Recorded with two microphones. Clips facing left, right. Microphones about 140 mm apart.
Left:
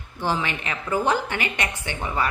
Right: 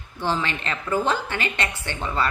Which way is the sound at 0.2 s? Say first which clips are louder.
Even; 15° left (ahead or behind).